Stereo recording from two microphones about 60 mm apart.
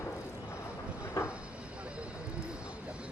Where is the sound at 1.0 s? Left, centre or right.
Left.